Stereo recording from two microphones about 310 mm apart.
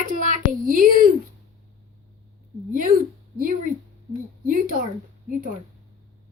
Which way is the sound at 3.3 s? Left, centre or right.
Right.